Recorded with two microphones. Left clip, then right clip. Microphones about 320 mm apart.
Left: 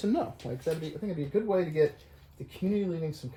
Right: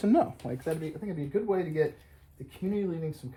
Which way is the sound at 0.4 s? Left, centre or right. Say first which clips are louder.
Right 1 dB; right.